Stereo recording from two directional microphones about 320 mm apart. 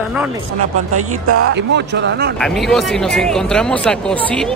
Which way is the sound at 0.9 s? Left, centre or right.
Right.